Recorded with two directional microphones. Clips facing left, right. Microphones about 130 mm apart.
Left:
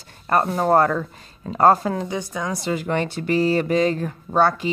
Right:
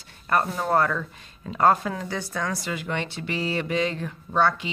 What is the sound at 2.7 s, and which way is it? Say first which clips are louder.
A woman's voice: left 7 dB; 45° left (ahead or behind).